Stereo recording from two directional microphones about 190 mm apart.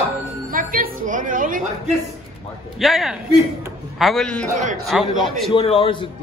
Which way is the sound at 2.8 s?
Centre (ahead or behind).